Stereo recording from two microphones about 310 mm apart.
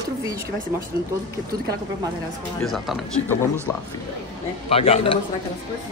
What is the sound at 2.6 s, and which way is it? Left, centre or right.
Speech, centre.